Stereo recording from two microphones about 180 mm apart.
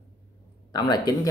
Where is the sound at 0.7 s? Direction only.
20° left (ahead or behind).